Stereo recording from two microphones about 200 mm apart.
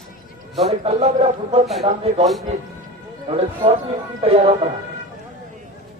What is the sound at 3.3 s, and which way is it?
Speech, 30° right (ahead or behind).